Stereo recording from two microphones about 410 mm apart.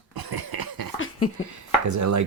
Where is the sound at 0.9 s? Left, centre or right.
Left.